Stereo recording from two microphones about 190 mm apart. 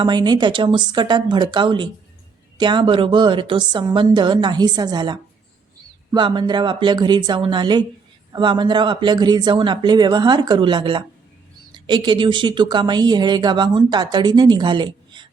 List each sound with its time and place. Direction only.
0.0 s speech: 25° right (ahead or behind)